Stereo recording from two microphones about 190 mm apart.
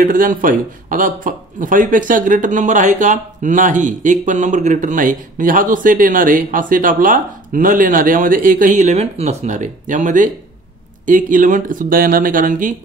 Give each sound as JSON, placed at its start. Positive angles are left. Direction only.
{"t": 0.0, "sound": "a man's voice", "side_deg": -45}